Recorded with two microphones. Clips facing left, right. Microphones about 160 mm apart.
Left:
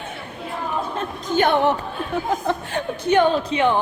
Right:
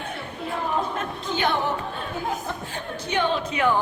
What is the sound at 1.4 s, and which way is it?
Speech, 60° left (ahead or behind).